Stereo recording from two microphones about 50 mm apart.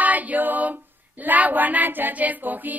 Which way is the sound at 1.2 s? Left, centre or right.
Right.